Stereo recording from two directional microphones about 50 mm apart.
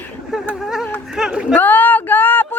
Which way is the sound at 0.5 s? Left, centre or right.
Centre.